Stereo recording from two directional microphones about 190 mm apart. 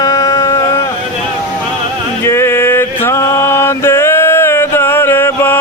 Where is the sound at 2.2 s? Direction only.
15° left (ahead or behind).